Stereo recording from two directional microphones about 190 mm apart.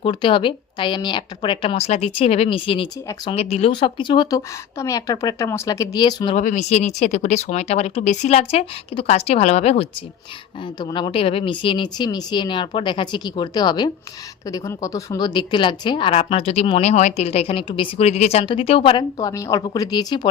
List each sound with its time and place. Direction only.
0.0 s a woman's voice: 25° left (ahead or behind)
6.3 s speech: 40° left (ahead or behind)
10.8 s a woman's voice: 20° left (ahead or behind)